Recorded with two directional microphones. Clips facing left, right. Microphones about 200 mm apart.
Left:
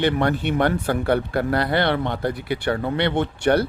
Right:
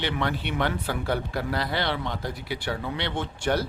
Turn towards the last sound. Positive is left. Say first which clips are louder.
# left 7 dB
turn(degrees=60)  # may be behind; listen again after turning